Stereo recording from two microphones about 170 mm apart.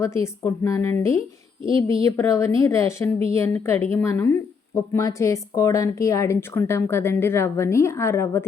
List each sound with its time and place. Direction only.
0.0 s speech: 15° left (ahead or behind)